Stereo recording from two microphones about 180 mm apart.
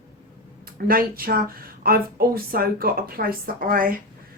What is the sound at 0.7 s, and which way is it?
A woman's voice, 55° right (ahead or behind).